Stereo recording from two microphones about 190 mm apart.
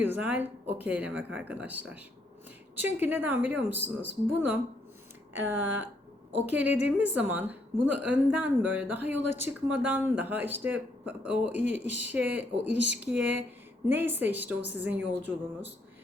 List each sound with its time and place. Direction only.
0.0 s speech: 10° right (ahead or behind)
12.7 s speech: 70° right (ahead or behind)
13.1 s speech: 5° right (ahead or behind)